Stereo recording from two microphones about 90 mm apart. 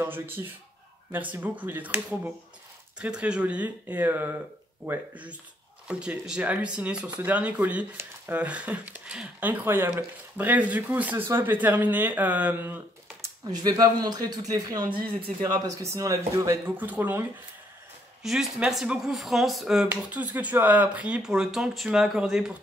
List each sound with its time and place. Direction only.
0.0 s speech: 25° right (ahead or behind)
13.7 s a man's voice: 45° right (ahead or behind)
16.6 s speech: 20° right (ahead or behind)
18.2 s speech: 5° right (ahead or behind)
20.0 s speech: 15° right (ahead or behind)